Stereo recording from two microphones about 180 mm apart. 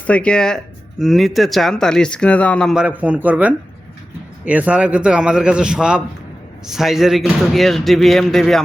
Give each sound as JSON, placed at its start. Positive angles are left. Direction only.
{"t": 0.1, "sound": "speech", "side_deg": 5}